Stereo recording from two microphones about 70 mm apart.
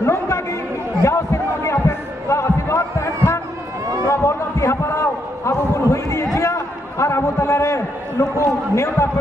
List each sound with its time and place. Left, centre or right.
0.0 s chatter: left
1.0 s basketball bounce: left
4.0 s a sound: left